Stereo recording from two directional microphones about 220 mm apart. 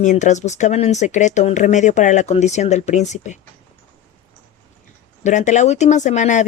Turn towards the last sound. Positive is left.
turn(degrees=35)  # may be behind; listen again after turning